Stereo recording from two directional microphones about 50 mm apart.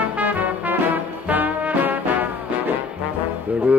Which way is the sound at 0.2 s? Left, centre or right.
Right.